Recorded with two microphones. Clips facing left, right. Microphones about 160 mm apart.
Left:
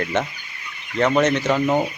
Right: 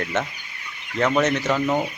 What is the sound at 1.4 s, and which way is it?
Speech, 15° left (ahead or behind).